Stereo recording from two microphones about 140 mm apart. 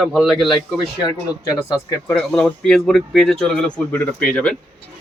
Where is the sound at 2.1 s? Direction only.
5° left (ahead or behind).